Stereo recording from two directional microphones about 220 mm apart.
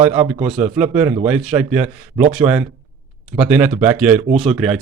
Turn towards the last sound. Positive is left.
turn(degrees=0)  # may be behind; listen again after turning